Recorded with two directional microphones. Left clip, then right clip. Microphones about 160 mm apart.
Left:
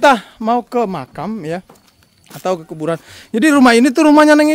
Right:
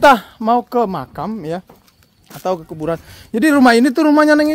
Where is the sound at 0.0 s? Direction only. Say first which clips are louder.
Right 1 dB; centre (ahead or behind).